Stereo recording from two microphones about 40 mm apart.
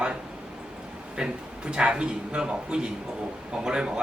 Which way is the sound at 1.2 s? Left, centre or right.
Centre.